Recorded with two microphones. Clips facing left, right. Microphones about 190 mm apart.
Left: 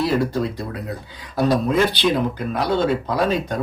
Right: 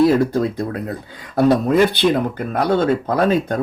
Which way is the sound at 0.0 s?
50° right (ahead or behind).